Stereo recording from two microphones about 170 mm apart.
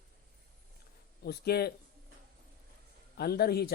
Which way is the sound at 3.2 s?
65° left (ahead or behind).